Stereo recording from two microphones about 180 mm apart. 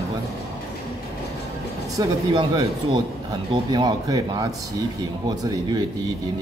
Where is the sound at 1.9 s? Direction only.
20° right (ahead or behind).